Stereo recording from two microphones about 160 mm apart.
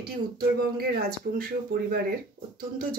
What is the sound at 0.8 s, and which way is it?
Speech, 70° right (ahead or behind).